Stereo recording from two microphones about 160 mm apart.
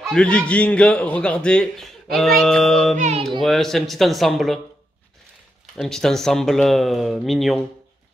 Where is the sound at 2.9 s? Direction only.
50° right (ahead or behind).